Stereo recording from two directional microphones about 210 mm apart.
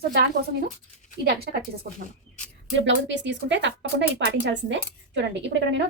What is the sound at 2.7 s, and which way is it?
Speech, 60° right (ahead or behind).